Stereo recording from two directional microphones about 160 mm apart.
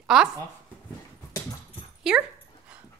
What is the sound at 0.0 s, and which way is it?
Speech, 5° right (ahead or behind).